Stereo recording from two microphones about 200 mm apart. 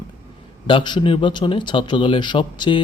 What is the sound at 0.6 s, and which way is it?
A man's voice, 25° left (ahead or behind).